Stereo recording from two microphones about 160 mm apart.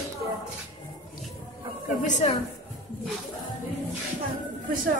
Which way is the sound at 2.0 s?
50° left (ahead or behind).